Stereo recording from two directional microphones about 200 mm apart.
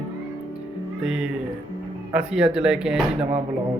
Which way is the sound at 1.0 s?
5° right (ahead or behind).